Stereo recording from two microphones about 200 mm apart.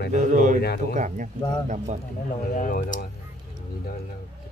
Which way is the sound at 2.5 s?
40° left (ahead or behind).